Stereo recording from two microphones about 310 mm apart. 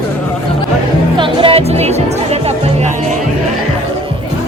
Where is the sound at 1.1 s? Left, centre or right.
Centre.